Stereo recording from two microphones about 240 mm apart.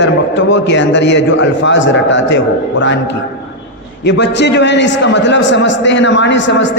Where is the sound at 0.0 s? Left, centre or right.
Left.